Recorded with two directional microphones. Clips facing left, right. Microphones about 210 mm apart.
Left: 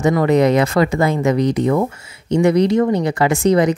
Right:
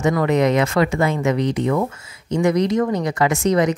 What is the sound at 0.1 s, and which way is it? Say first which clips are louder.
Speech: left 4 dB; 30° left (ahead or behind).